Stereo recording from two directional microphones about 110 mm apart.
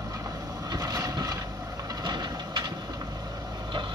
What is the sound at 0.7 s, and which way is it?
Vehicle, 35° right (ahead or behind).